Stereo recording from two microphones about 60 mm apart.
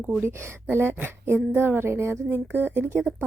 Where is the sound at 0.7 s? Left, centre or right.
Right.